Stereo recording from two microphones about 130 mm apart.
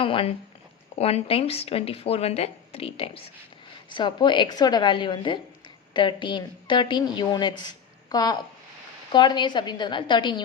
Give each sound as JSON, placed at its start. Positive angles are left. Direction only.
{"t": 0.0, "sound": "a woman's voice", "side_deg": 45}